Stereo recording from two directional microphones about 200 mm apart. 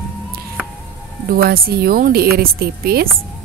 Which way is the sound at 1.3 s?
50° right (ahead or behind).